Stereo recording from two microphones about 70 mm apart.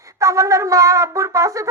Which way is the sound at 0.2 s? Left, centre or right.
Right.